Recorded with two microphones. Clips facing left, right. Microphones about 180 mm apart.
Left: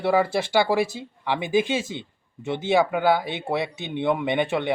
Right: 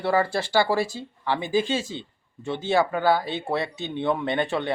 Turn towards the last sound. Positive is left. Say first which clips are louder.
# left 2 dB
turn(degrees=15)  # may be behind; listen again after turning